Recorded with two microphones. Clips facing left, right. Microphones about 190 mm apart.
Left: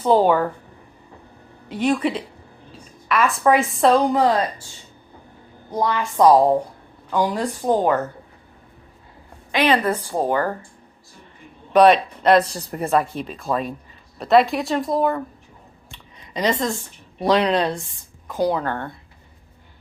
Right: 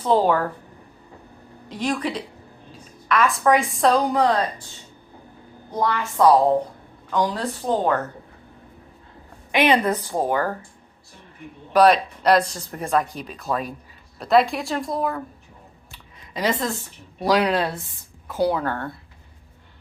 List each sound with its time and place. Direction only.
0.0 s a woman's voice: 5° left (ahead or behind)
1.7 s a woman's voice: 5° left (ahead or behind)
5.7 s a woman's voice: 15° left (ahead or behind)
9.5 s a woman's voice: 20° right (ahead or behind)
11.7 s a woman's voice: centre (ahead or behind)
15.9 s a sound: 5° right (ahead or behind)
17.2 s a woman's voice: 5° right (ahead or behind)
18.5 s a woman's voice: 5° right (ahead or behind)